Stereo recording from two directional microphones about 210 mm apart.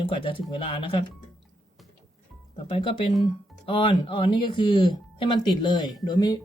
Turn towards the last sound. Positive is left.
turn(degrees=20)  # may be behind; listen again after turning